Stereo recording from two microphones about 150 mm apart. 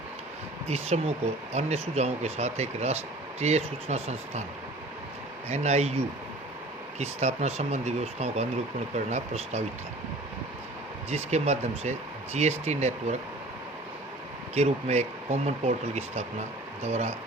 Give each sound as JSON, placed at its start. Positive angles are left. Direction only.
{"t": 0.7, "sound": "speech", "side_deg": -45}
{"t": 5.5, "sound": "speech", "side_deg": -45}
{"t": 7.0, "sound": "speech", "side_deg": -45}
{"t": 11.1, "sound": "speech", "side_deg": -45}
{"t": 14.5, "sound": "speech", "side_deg": -45}